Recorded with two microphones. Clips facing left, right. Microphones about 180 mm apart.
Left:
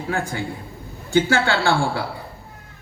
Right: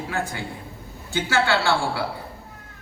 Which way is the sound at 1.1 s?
45° left (ahead or behind).